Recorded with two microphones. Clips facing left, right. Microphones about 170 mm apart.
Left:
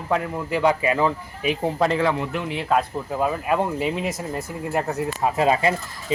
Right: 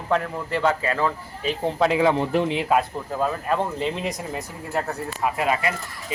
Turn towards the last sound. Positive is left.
turn(degrees=30)  # may be behind; listen again after turning